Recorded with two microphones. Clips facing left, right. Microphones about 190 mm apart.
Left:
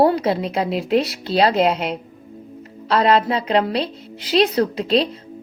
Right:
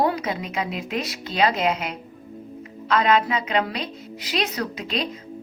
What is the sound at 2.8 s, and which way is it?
A woman's voice, 35° left (ahead or behind).